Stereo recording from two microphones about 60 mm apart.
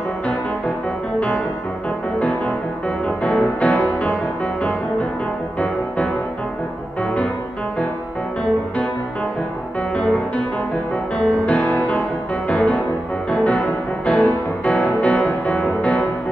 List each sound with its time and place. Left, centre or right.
2.1 s music: left
9.9 s music: left